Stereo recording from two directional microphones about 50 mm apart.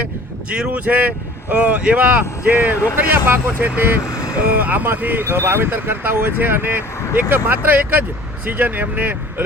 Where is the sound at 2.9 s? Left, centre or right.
Right.